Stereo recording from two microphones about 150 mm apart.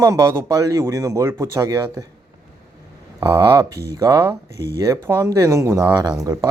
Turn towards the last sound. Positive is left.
turn(degrees=-25)  # may be behind; listen again after turning